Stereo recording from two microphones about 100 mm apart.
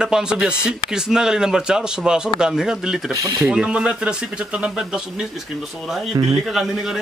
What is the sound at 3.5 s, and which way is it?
Speech, 10° right (ahead or behind).